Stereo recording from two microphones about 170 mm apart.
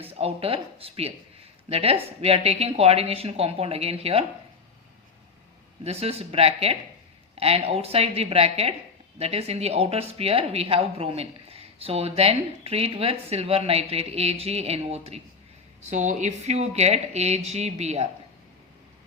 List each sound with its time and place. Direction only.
0.0 s a woman's voice: 35° right (ahead or behind)
5.8 s a woman's voice: 35° right (ahead or behind)